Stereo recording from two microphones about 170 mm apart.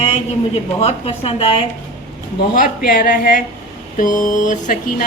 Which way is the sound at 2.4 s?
60° left (ahead or behind).